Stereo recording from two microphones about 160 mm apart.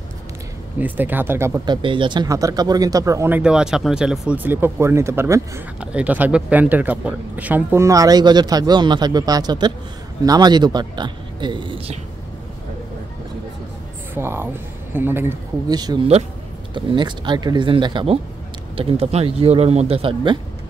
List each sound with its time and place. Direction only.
0.7 s speech: 10° right (ahead or behind)
1.7 s speech: 30° right (ahead or behind)
14.1 s speech: 15° right (ahead or behind)
15.7 s speech: 25° right (ahead or behind)